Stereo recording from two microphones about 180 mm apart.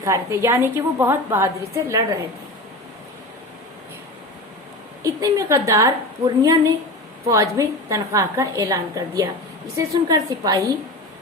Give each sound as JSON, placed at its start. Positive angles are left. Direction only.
{"t": 0.0, "sound": "a woman's voice", "side_deg": -15}
{"t": 5.0, "sound": "a woman's voice", "side_deg": -20}